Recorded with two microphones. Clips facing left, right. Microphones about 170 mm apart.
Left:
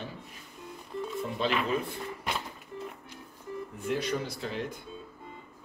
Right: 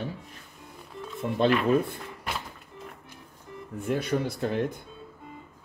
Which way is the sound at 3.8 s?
55° right (ahead or behind).